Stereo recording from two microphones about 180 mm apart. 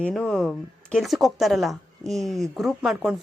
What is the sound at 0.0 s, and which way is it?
Speech, 5° left (ahead or behind).